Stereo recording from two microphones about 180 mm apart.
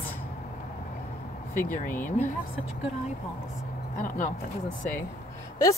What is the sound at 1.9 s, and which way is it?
Speech, 10° left (ahead or behind).